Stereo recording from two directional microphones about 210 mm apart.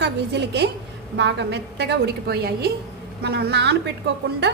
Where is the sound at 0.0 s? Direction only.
55° right (ahead or behind).